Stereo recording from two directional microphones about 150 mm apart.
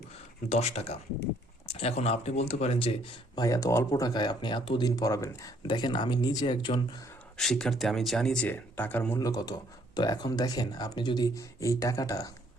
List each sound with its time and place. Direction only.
0.4 s speech: 45° left (ahead or behind)
3.4 s speech: 20° left (ahead or behind)
7.3 s speech: 5° left (ahead or behind)
9.1 s speech: 25° left (ahead or behind)